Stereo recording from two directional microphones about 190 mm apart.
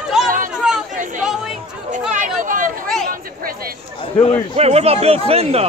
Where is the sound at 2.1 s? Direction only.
45° right (ahead or behind).